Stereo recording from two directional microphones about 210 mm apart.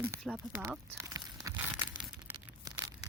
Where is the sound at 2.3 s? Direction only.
20° right (ahead or behind).